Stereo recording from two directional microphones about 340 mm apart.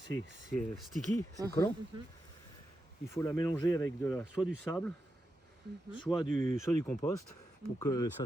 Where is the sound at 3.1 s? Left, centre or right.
Centre.